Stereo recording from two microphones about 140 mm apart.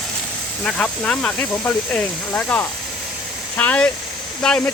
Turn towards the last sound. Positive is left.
turn(degrees=5)  # may be behind; listen again after turning